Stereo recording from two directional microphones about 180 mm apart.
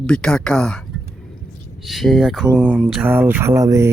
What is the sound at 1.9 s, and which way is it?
Speech, centre (ahead or behind).